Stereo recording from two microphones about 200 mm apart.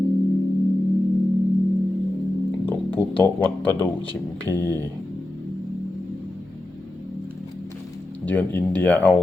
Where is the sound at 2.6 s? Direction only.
10° left (ahead or behind).